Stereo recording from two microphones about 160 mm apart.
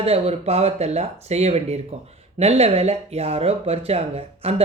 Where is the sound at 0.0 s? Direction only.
40° right (ahead or behind).